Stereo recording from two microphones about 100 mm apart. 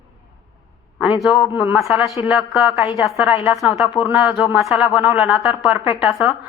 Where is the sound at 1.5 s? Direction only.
15° right (ahead or behind).